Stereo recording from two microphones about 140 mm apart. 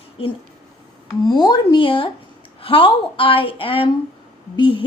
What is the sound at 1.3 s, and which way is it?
A woman's voice, 30° left (ahead or behind).